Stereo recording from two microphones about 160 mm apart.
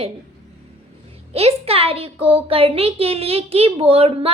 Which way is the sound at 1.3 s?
40° right (ahead or behind).